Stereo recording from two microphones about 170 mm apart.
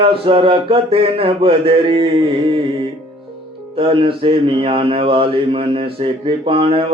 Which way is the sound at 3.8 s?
35° right (ahead or behind).